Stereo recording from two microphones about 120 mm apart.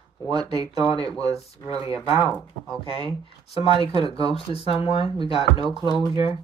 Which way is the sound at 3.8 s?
45° left (ahead or behind).